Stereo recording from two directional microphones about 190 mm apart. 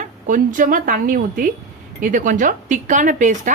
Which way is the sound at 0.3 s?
45° right (ahead or behind).